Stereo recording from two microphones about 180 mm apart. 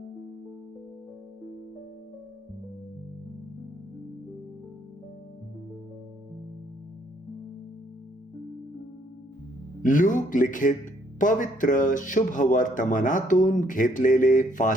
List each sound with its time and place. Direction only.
9.8 s speech: 45° left (ahead or behind)